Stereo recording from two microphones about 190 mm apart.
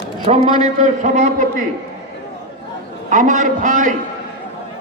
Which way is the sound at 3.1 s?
40° right (ahead or behind).